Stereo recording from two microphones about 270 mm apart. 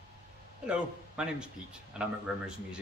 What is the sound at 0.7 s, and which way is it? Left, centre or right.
Speech, centre.